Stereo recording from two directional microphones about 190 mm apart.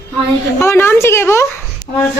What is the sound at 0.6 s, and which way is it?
Speech, 15° left (ahead or behind).